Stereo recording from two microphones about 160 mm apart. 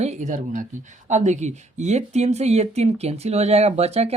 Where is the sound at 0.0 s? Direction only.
45° right (ahead or behind).